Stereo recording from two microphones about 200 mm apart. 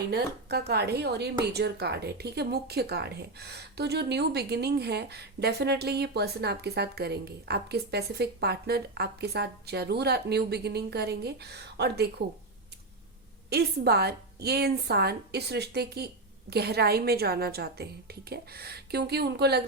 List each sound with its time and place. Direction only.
0.1 s a woman's voice: 55° right (ahead or behind)
13.5 s speech: 55° right (ahead or behind)